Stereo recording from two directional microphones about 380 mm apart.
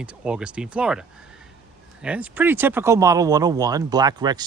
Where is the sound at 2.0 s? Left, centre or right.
Centre.